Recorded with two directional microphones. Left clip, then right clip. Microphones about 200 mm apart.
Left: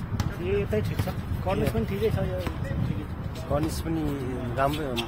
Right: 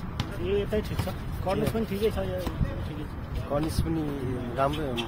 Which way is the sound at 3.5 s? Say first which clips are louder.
Left 1 dB; 15° left (ahead or behind).